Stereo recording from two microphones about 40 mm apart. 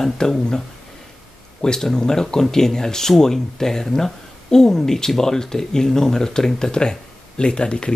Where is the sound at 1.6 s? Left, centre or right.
Centre.